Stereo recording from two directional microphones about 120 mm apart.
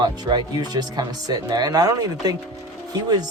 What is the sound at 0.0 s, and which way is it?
Speech, 35° right (ahead or behind).